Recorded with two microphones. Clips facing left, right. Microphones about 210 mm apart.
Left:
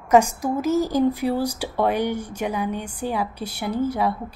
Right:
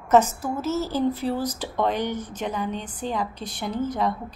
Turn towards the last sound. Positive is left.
turn(degrees=10)  # may be behind; listen again after turning